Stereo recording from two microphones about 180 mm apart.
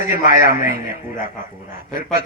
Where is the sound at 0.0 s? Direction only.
45° left (ahead or behind).